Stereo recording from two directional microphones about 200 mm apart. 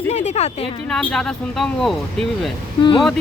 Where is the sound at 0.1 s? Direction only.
35° left (ahead or behind).